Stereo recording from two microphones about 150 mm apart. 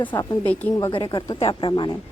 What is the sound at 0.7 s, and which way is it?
A woman's voice, 25° left (ahead or behind).